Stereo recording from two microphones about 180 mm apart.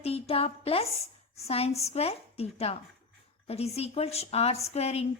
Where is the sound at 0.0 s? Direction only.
35° left (ahead or behind).